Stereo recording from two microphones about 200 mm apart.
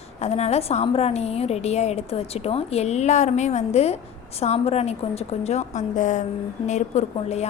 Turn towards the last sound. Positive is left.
turn(degrees=35)  # may be behind; listen again after turning